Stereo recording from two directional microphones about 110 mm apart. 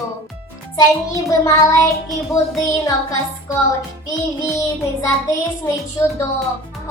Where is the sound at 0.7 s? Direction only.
30° left (ahead or behind).